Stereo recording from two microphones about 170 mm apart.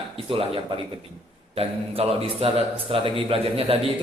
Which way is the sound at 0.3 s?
35° right (ahead or behind).